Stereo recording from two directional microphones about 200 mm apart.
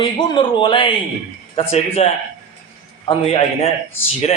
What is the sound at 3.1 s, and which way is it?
A man's voice, 30° left (ahead or behind).